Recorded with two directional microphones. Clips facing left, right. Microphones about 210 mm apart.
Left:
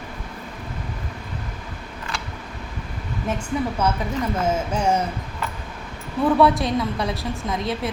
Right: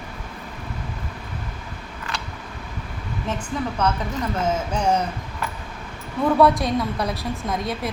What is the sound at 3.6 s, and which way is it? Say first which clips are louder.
Speech: even; 10° left (ahead or behind).